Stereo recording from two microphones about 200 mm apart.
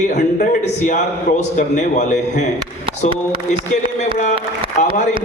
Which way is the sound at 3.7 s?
35° left (ahead or behind).